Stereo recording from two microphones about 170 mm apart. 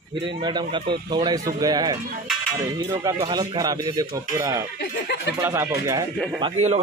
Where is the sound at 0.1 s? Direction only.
30° right (ahead or behind).